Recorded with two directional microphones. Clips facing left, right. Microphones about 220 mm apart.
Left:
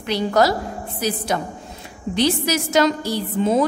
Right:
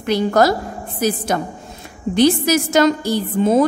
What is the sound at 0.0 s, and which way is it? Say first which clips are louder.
A woman's voice: right 3 dB; 50° right (ahead or behind).